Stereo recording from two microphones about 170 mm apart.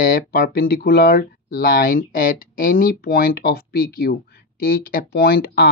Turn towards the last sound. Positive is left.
turn(degrees=65)  # may be behind; listen again after turning